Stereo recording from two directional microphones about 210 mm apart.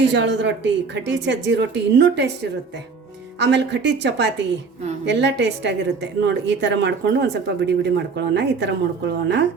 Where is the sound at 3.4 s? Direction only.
55° right (ahead or behind).